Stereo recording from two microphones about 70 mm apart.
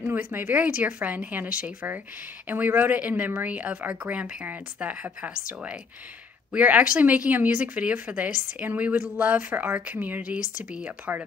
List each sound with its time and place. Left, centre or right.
0.3 s speech: right